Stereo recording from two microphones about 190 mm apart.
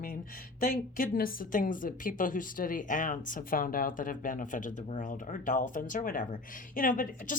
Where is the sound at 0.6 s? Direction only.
45° left (ahead or behind).